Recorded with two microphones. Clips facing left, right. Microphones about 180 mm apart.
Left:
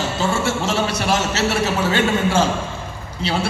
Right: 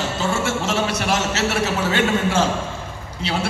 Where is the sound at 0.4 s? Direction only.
30° left (ahead or behind).